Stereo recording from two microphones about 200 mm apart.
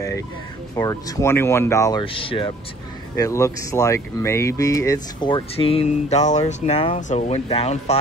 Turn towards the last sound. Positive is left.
turn(degrees=30)  # may be behind; listen again after turning